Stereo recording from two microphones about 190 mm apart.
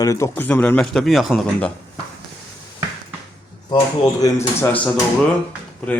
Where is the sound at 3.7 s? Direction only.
20° left (ahead or behind).